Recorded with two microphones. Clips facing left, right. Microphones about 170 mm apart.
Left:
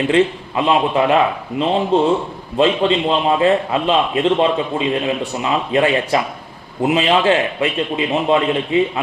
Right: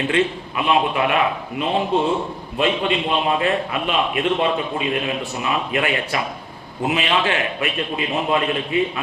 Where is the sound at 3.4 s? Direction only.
25° left (ahead or behind).